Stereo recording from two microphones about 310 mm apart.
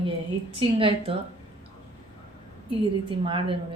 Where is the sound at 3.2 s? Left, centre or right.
Centre.